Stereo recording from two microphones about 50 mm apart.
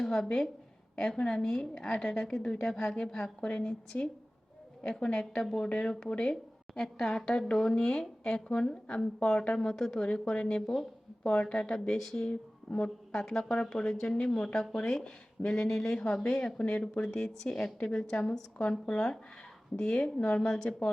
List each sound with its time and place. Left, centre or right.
0.0 s a woman's voice: centre
10.1 s a woman's voice: left
12.3 s speech: left
13.1 s a woman's voice: centre; by 20.9 s left